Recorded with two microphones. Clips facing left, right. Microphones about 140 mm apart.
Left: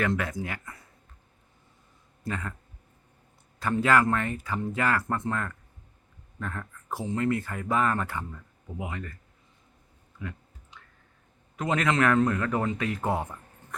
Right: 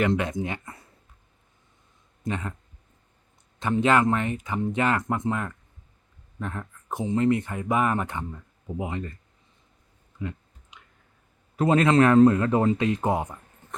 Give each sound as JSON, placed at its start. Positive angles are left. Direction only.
{"t": 0.0, "sound": "a man's voice", "side_deg": -20}
{"t": 2.2, "sound": "a man's voice", "side_deg": -20}
{"t": 3.6, "sound": "a man's voice", "side_deg": -20}
{"t": 10.2, "sound": "clicking", "side_deg": -20}
{"t": 11.5, "sound": "a man's voice", "side_deg": -35}